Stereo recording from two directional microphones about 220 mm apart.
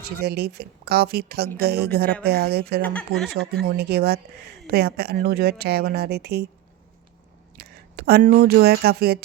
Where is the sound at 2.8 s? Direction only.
5° left (ahead or behind).